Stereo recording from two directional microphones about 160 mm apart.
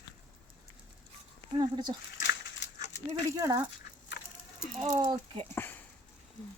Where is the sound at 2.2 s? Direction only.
90° left.